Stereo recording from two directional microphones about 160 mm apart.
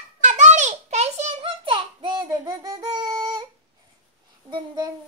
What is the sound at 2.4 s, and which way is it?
Child singing, 25° right (ahead or behind).